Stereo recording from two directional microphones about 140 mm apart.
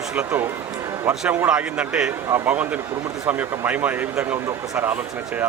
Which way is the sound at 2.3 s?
20° right (ahead or behind).